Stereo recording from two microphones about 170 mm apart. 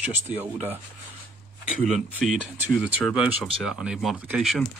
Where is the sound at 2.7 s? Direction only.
5° right (ahead or behind).